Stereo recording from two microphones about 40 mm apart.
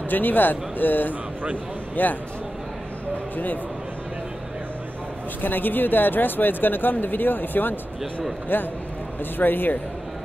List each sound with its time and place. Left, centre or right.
0.1 s speech: left
5.4 s speech: left
9.4 s speech: left